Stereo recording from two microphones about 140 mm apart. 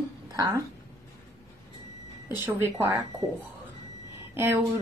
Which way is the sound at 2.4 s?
20° right (ahead or behind).